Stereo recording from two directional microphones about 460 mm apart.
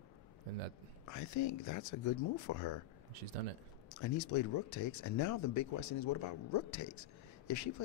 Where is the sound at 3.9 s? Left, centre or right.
Left.